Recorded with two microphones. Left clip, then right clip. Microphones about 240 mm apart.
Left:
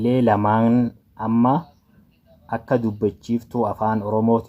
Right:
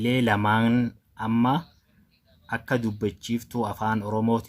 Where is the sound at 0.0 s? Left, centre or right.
Right.